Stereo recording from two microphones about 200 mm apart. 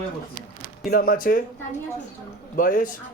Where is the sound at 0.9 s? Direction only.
45° left (ahead or behind).